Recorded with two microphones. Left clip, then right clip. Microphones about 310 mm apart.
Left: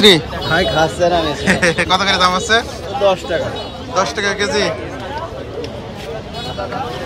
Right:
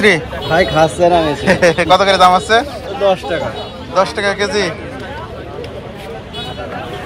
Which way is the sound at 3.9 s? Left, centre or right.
Centre.